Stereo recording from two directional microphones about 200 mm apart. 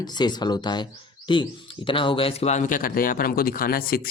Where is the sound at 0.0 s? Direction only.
20° left (ahead or behind).